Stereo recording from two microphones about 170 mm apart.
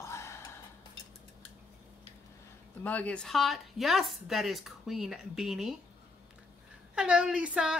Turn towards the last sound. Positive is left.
turn(degrees=-5)  # may be behind; listen again after turning